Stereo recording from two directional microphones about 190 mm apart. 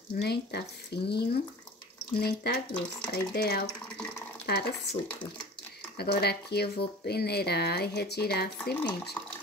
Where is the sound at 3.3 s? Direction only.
60° left (ahead or behind).